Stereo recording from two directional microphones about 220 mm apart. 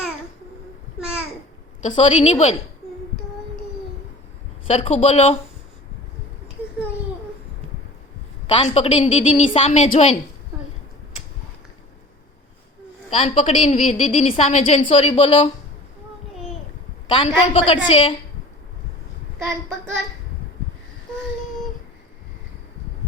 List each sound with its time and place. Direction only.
0.9 s babbling: 5° right (ahead or behind)
2.0 s speech: 30° left (ahead or behind)
4.6 s speech: 30° left (ahead or behind)
8.4 s a woman's voice: 30° left (ahead or behind)
13.1 s a woman's voice: 25° left (ahead or behind)
17.1 s a woman's voice: 25° left (ahead or behind)